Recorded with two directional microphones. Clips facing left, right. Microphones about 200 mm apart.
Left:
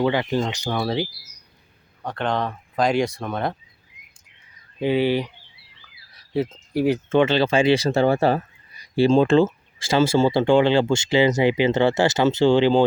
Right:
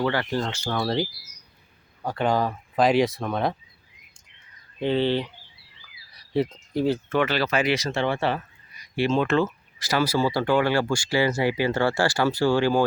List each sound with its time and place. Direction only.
0.0 s speech: 15° left (ahead or behind)
2.0 s speech: 5° right (ahead or behind)
4.8 s speech: 10° left (ahead or behind)